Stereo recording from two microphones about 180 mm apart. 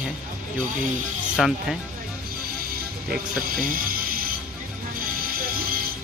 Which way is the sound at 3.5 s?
50° right (ahead or behind).